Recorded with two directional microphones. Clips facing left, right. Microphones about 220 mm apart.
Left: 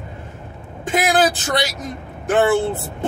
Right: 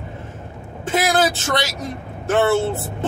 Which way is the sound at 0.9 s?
15° left (ahead or behind).